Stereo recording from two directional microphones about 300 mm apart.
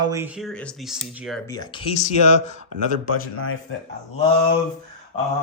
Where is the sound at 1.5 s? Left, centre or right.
Centre.